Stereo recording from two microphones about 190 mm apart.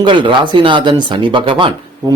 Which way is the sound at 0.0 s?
25° right (ahead or behind).